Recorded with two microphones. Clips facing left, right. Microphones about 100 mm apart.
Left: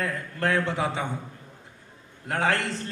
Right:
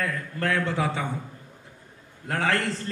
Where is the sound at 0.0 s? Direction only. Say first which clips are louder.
Left 1 dB; 25° left (ahead or behind).